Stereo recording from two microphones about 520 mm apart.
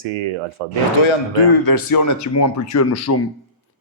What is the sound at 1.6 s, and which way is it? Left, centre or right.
Speech, left.